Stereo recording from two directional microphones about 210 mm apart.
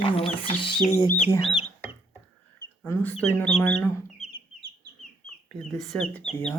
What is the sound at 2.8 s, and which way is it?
Speech, 10° left (ahead or behind).